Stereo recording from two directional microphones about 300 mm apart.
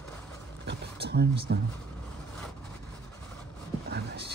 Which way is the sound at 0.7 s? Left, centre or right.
Right.